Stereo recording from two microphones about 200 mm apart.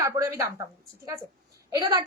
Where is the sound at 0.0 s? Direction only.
15° right (ahead or behind).